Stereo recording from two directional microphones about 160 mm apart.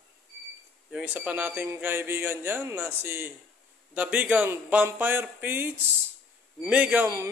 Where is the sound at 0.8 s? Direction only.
5° right (ahead or behind).